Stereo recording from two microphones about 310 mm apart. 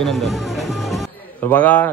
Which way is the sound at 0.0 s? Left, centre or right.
Centre.